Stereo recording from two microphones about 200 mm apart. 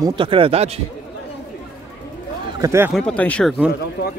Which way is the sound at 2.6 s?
15° right (ahead or behind).